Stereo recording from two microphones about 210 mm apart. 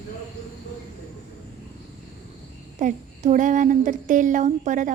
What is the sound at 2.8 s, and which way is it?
A woman's voice, 40° right (ahead or behind).